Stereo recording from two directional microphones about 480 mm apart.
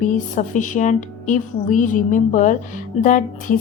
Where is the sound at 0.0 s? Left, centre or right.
Centre.